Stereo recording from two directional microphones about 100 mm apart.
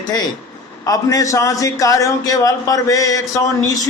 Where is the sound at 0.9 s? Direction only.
35° left (ahead or behind).